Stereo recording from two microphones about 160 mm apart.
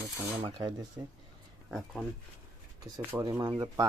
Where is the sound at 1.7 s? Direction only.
Centre (ahead or behind).